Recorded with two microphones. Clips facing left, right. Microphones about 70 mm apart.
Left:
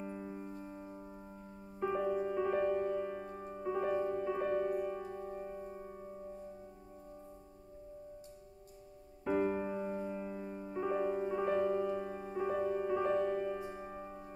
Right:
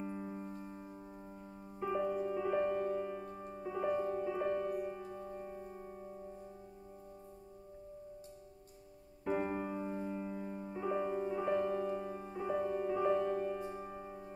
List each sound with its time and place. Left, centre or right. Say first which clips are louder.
0.0 s music: right 1 dB; centre
9.3 s piano: left 3 dB; centre
9.6 s music: left 2 dB; centre
11.1 s music: left 1 dB; centre
12.4 s music: left 1 dB; centre
12.7 s music: even; centre